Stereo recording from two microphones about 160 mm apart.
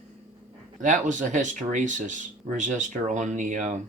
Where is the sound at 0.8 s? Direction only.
50° right (ahead or behind).